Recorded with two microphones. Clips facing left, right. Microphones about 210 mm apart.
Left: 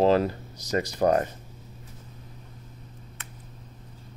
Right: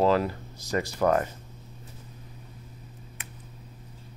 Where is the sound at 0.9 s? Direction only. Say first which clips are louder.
Left 1 dB; 35° left (ahead or behind).